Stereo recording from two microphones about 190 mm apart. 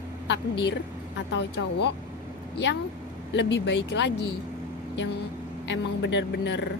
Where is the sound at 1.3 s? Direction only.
70° left (ahead or behind).